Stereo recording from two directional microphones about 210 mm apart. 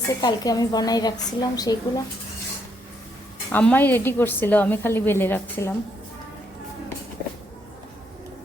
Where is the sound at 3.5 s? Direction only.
10° left (ahead or behind).